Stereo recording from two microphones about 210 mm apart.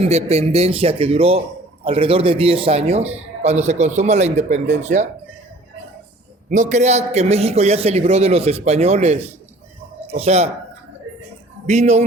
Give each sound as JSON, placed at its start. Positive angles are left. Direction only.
{"t": 0.0, "sound": "a man's voice", "side_deg": -30}
{"t": 6.5, "sound": "a man's voice", "side_deg": -35}
{"t": 11.6, "sound": "speech", "side_deg": -30}